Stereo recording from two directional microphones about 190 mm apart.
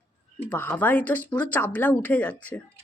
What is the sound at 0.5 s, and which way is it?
Speech, 10° left (ahead or behind).